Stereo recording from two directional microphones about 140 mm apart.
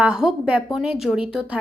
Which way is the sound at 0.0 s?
5° right (ahead or behind).